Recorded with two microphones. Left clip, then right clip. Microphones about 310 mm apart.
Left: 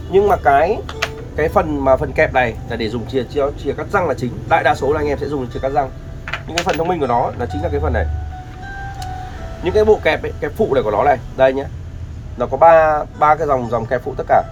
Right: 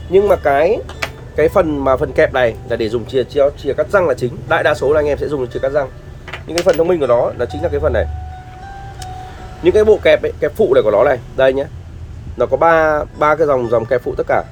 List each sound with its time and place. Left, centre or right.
0.1 s speech: right
6.8 s speech: right
9.7 s speech: right